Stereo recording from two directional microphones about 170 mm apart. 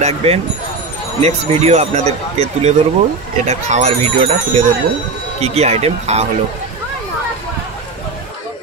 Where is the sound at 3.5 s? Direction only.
40° right (ahead or behind).